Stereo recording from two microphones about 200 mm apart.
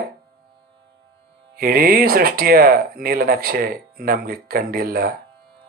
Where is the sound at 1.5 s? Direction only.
50° right (ahead or behind).